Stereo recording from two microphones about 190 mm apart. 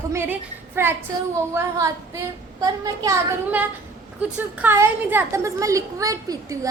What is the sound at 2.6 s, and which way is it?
A woman's voice, 20° right (ahead or behind).